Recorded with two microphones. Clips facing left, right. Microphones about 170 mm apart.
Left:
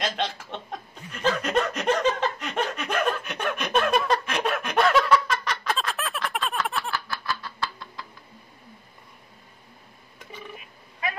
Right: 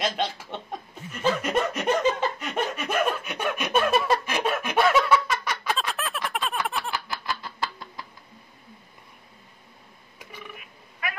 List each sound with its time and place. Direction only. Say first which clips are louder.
0.0 s chuckle: right 1 dB; 5° right (ahead or behind)
6.9 s snicker: even; 20° right (ahead or behind)
11.0 s a sound: left 3 dB; 25° left (ahead or behind)